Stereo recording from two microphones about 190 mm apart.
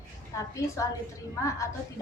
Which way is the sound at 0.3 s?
15° left (ahead or behind).